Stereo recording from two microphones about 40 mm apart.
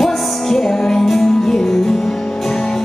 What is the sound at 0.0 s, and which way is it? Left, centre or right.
Music, centre.